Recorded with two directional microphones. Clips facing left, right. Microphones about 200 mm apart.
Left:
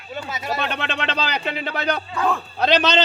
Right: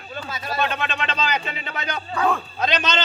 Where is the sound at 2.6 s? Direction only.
65° left (ahead or behind).